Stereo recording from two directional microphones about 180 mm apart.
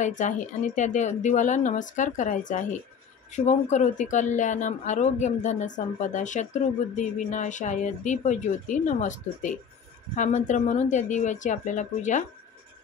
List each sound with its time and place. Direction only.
0.0 s speech: 45° left (ahead or behind)